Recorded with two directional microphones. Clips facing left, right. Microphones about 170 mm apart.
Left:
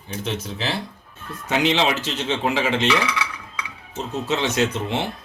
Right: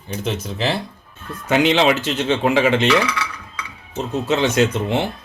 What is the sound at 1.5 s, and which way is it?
Speech, 60° right (ahead or behind).